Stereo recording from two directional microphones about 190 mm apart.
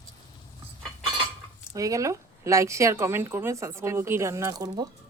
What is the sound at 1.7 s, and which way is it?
Speech, 15° right (ahead or behind).